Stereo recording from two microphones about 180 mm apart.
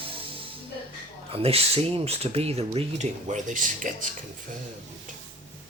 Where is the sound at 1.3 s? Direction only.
35° right (ahead or behind).